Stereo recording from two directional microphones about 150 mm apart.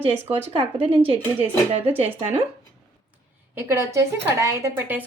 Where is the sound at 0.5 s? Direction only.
35° right (ahead or behind).